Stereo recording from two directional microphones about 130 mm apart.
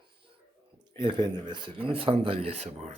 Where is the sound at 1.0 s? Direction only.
35° right (ahead or behind); by 2.9 s 60° right (ahead or behind).